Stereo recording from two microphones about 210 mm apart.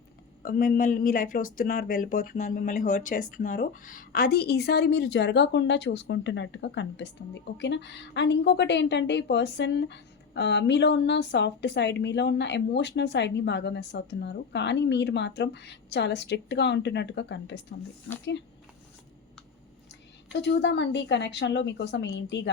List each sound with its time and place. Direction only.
0.4 s a woman's voice: 45° left (ahead or behind)
20.3 s a woman's voice: 55° left (ahead or behind)